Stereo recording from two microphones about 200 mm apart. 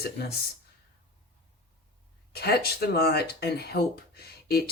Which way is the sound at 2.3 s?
50° left (ahead or behind).